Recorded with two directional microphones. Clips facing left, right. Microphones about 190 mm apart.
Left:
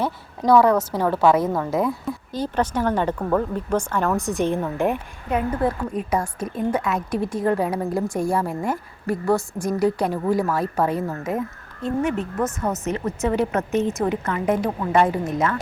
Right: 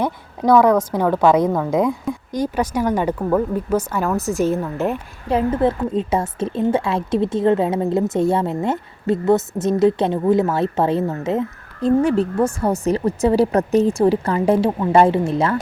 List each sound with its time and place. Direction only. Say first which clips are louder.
0.4 s speech: right 2 dB; 5° right (ahead or behind)
5.3 s a woman's voice: right 5 dB; 25° right (ahead or behind)